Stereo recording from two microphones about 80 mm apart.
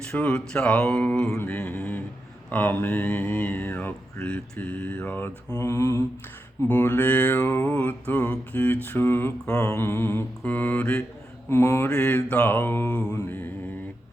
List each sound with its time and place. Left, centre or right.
0.2 s speech: centre
1.4 s a sound: centre
2.5 s mantra: left
5.6 s mantra: left
6.7 s mantra: left
7.8 s mantra: centre
9.5 s mantra: left; by 11.0 s centre
11.4 s mantra: left
11.9 s speech: centre
13.1 s mantra: left